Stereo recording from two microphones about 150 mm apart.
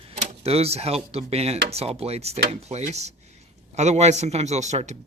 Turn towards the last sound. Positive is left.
turn(degrees=-50)  # may be behind; listen again after turning